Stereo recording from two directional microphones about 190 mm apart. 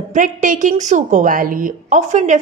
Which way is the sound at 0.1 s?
40° right (ahead or behind).